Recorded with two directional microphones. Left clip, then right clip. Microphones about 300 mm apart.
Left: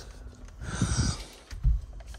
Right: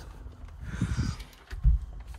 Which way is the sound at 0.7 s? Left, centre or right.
Centre.